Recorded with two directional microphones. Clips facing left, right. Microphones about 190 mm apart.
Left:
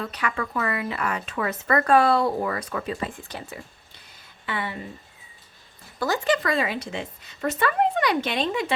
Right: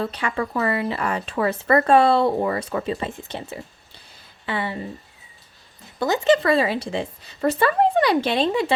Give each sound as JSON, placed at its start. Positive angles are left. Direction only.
{"t": 0.0, "sound": "speech", "side_deg": -30}
{"t": 6.0, "sound": "speech", "side_deg": -20}